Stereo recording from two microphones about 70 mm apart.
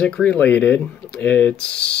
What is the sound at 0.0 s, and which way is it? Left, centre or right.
Speech, centre.